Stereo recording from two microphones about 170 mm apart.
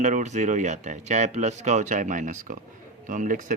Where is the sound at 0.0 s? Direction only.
45° right (ahead or behind).